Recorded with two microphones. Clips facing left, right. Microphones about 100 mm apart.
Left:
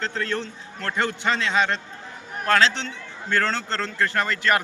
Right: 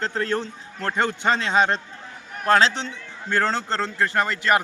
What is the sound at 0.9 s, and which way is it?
Speech, 20° right (ahead or behind).